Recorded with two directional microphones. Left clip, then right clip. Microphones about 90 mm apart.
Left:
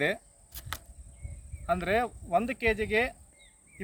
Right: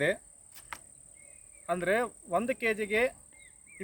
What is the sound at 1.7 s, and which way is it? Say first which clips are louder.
Speech: left 1 dB; 35° right (ahead or behind).